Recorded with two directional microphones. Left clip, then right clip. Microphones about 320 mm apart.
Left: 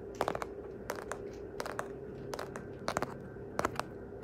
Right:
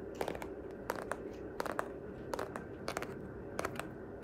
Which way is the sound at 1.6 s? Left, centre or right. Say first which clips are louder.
Right 1 dB; centre.